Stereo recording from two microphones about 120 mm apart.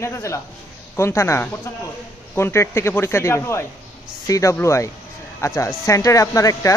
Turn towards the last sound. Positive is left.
turn(degrees=25)  # may be behind; listen again after turning